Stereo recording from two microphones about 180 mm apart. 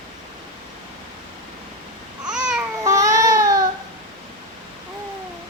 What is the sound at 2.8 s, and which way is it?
Baby cry, 20° right (ahead or behind).